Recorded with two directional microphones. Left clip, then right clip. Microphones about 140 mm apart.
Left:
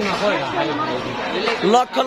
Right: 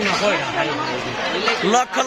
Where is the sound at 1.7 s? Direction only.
15° left (ahead or behind).